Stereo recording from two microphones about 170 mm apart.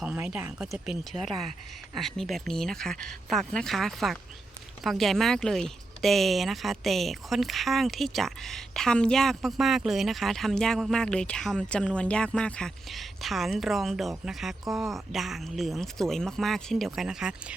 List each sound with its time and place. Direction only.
0.0 s speech: 5° right (ahead or behind)